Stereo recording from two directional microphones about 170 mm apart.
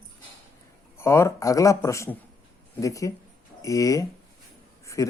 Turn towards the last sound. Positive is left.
turn(degrees=20)  # may be behind; listen again after turning